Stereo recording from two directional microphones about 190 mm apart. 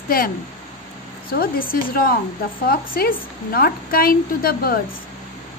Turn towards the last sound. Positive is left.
turn(degrees=50)  # may be behind; listen again after turning